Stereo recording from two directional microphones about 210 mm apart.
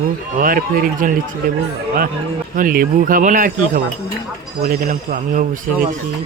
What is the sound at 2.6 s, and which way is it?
Speech, 40° right (ahead or behind).